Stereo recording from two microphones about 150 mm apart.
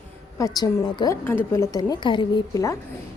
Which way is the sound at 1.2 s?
15° left (ahead or behind).